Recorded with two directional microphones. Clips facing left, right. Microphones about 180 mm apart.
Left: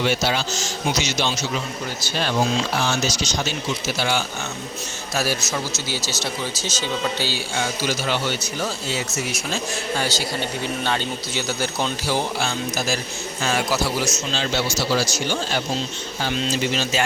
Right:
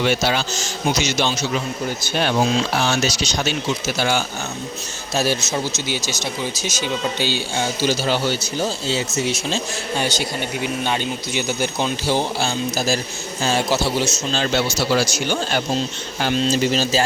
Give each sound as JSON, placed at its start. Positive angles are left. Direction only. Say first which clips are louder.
{"t": 2.0, "sound": "speech", "louder": "right 3 dB", "side_deg": -55}
{"t": 2.7, "sound": "speech", "louder": "right 3 dB", "side_deg": -70}
{"t": 3.8, "sound": "speech", "louder": "right 2 dB", "side_deg": -45}
{"t": 5.1, "sound": "speech", "louder": "right 4 dB", "side_deg": -25}
{"t": 14.3, "sound": "speech", "louder": "right 4 dB", "side_deg": -55}
{"t": 16.5, "sound": "speech", "louder": "right 4 dB", "side_deg": -35}